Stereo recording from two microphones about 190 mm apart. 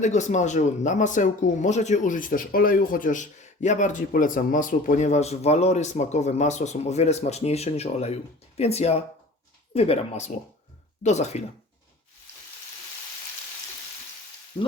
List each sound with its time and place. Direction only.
0.0 s speech: 40° left (ahead or behind)
14.5 s frying: 25° left (ahead or behind)